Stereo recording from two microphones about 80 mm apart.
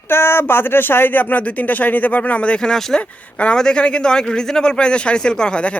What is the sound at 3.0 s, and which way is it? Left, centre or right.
Speech, centre.